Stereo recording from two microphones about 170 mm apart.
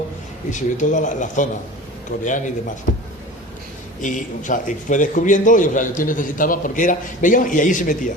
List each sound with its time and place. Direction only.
0.5 s a man's voice: 45° left (ahead or behind)
4.0 s a man's voice: 50° left (ahead or behind)